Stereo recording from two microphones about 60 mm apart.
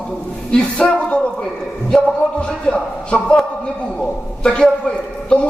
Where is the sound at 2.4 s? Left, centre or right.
Centre.